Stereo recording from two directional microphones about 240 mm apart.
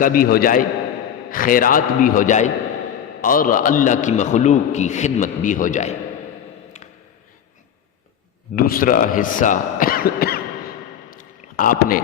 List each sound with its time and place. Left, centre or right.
0.0 s a man's voice: left
8.5 s a man's voice: left
11.1 s a sound: left